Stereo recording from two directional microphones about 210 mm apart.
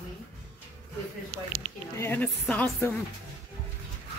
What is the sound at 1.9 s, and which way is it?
Speech, 10° left (ahead or behind).